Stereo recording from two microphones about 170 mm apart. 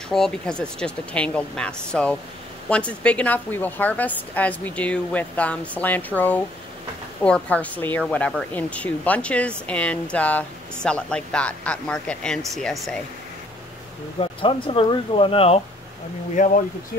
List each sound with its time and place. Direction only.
0.1 s a woman's voice: 5° left (ahead or behind)
14.4 s speech: 30° left (ahead or behind)
16.4 s speech: 45° left (ahead or behind)